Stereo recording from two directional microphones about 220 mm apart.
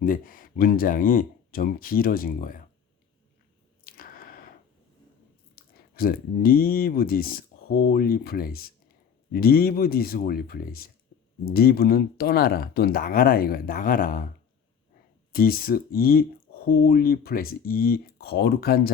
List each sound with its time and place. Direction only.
0.0 s speech: 40° left (ahead or behind)
3.8 s squish: 40° left (ahead or behind)
5.5 s speech: 45° left (ahead or behind)
15.3 s speech: 40° left (ahead or behind)